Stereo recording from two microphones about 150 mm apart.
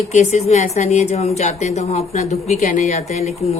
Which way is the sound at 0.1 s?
50° left (ahead or behind).